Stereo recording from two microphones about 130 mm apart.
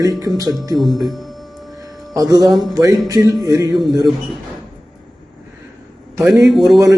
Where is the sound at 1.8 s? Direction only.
30° right (ahead or behind).